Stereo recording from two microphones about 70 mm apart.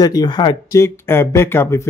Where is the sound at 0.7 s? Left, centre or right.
Left.